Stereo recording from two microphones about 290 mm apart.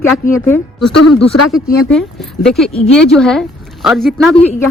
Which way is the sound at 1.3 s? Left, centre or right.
Left.